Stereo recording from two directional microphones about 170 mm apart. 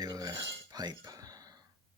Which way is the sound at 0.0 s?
20° right (ahead or behind).